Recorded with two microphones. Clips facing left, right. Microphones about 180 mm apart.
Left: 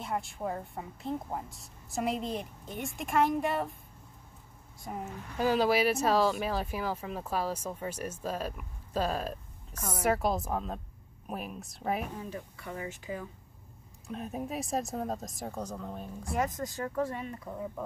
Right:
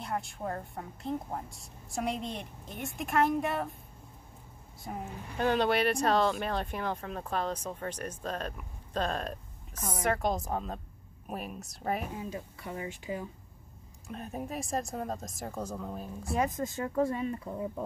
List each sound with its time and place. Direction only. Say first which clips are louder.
0.0 s speech: left 1 dB; centre (ahead or behind)
4.9 s speech: even; centre (ahead or behind)
9.8 s speech: even; 10° right (ahead or behind)
10.0 s speech: left 2 dB; 5° left (ahead or behind)
12.6 s speech: right 1 dB; 25° right (ahead or behind)
14.0 s speech: left 2 dB; centre (ahead or behind)
16.3 s speech: right 1 dB; 15° right (ahead or behind)